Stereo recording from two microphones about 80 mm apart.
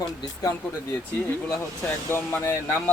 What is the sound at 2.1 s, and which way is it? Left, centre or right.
Speech, left.